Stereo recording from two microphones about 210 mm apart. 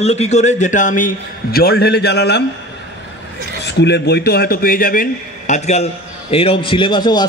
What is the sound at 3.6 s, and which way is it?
A man's voice, 55° left (ahead or behind).